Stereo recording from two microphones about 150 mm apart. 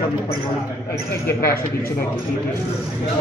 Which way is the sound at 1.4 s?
80° left.